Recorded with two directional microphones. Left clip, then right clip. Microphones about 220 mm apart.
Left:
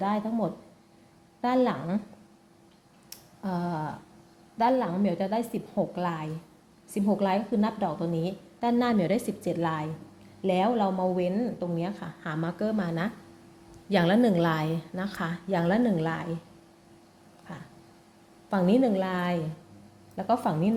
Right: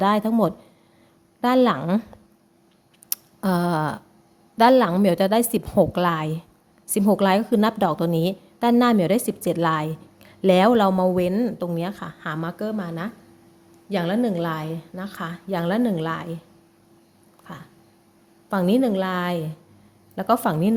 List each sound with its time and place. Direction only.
0.0 s a woman's voice: 35° right (ahead or behind)
3.1 s a sound: 40° right (ahead or behind)
4.5 s a woman's voice: 35° right (ahead or behind); by 16.3 s 15° right (ahead or behind)
17.5 s a woman's voice: 20° right (ahead or behind)